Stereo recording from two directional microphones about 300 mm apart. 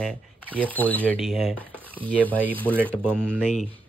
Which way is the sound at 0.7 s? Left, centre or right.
Centre.